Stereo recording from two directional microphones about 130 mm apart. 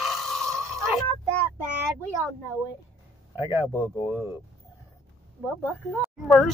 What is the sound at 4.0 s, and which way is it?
Speech, 5° right (ahead or behind).